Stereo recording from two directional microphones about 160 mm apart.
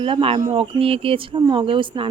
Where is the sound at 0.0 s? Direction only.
35° right (ahead or behind).